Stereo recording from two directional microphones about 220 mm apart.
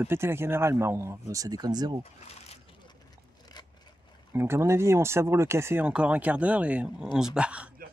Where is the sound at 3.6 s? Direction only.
20° left (ahead or behind).